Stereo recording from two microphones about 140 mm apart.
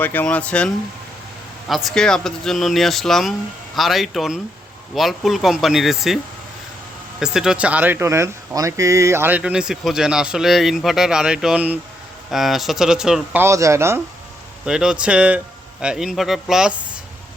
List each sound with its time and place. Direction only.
0.0 s speech: 15° left (ahead or behind)
7.2 s speech: 5° right (ahead or behind)
13.4 s a man's voice: 20° right (ahead or behind)
14.6 s speech: 5° right (ahead or behind)